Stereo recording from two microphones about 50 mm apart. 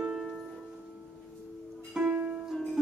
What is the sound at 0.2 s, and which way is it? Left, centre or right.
Music, centre.